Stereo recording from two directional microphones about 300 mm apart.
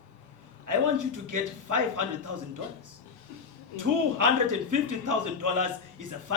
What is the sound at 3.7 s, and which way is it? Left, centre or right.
A man's voice, right.